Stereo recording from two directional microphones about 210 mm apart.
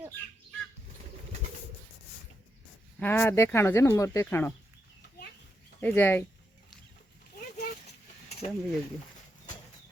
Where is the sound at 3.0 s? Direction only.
10° left (ahead or behind).